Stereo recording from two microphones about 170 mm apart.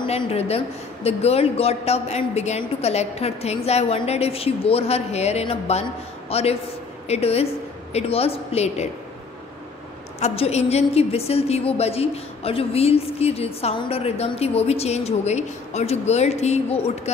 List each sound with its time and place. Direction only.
0.0 s a woman's voice: 35° left (ahead or behind)
10.2 s a woman's voice: 40° left (ahead or behind)